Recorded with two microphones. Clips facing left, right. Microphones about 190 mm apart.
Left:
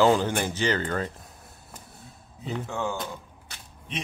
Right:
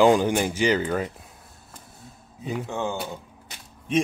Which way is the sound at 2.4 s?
15° right (ahead or behind).